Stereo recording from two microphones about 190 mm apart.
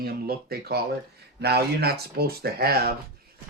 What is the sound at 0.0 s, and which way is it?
Speech, 50° right (ahead or behind).